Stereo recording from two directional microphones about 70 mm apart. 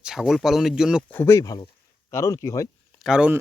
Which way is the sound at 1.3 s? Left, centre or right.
Left.